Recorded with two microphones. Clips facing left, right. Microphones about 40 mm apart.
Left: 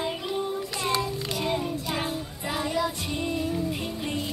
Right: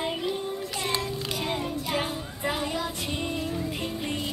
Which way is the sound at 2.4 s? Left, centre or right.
Centre.